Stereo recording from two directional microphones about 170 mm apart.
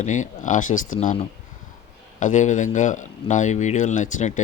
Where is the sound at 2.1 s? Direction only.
45° left (ahead or behind).